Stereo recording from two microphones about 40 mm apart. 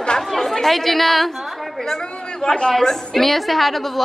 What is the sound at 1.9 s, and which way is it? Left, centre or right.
A man's voice, centre.